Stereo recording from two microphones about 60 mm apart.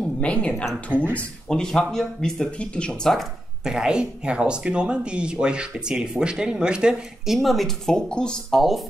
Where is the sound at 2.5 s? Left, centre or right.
Centre.